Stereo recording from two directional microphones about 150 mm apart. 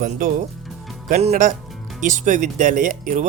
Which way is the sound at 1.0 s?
50° right (ahead or behind).